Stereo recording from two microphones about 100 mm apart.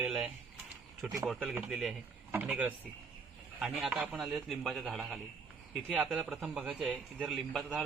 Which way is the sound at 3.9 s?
15° right (ahead or behind).